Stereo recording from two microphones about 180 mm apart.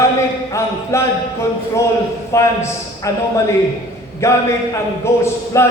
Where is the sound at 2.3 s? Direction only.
15° left (ahead or behind).